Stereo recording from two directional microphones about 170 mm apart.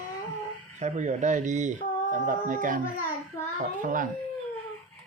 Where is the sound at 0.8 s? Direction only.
45° right (ahead or behind).